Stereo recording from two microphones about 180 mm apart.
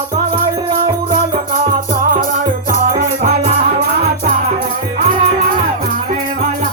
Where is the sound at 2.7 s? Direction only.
45° right (ahead or behind).